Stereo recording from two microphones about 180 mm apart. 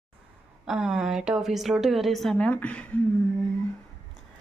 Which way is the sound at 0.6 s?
5° right (ahead or behind).